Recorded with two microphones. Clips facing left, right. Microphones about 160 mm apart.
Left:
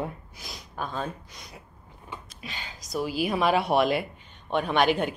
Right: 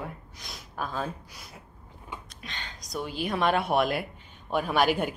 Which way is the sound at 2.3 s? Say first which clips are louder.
Left 1 dB; 5° left (ahead or behind).